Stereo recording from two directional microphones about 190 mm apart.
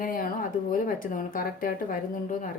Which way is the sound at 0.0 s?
45° left (ahead or behind).